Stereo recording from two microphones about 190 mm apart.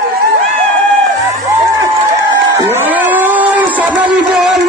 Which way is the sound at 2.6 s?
10° right (ahead or behind).